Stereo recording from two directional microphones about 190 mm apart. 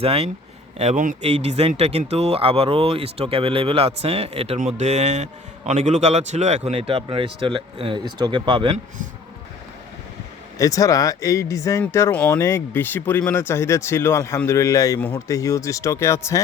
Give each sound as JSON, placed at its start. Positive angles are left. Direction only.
{"t": 0.0, "sound": "speech", "side_deg": -30}
{"t": 10.6, "sound": "speech", "side_deg": 15}